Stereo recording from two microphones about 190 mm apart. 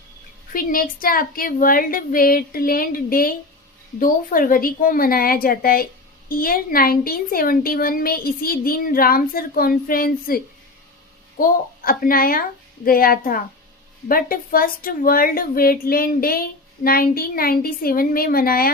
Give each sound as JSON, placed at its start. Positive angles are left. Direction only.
{"t": 0.5, "sound": "a woman's voice", "side_deg": 50}